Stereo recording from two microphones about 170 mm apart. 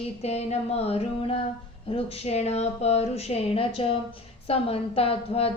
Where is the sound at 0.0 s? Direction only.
40° left (ahead or behind).